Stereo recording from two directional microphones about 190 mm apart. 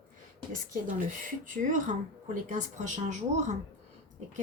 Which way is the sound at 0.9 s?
45° right (ahead or behind).